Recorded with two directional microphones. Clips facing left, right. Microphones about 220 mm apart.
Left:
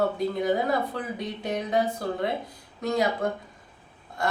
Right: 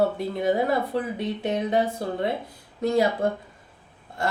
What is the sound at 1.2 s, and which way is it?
Speech, 25° right (ahead or behind).